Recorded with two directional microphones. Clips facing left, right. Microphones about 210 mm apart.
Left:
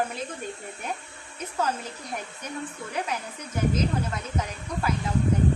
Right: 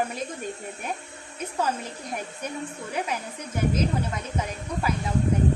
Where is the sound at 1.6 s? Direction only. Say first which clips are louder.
Even; 10° right (ahead or behind).